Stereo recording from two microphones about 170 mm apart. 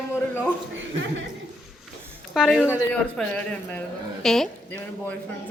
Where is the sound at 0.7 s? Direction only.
90° right.